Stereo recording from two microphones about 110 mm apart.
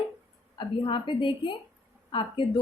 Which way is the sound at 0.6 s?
50° left (ahead or behind).